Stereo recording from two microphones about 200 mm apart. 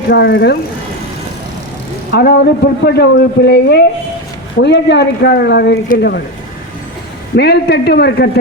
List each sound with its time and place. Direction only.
0.1 s a man's voice: 55° left (ahead or behind)
2.1 s a man's voice: 55° left (ahead or behind)
7.3 s a man's voice: 55° left (ahead or behind)